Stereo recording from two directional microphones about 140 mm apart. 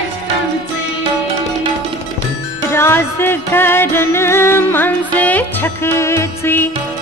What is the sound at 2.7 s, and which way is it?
Music, 15° left (ahead or behind).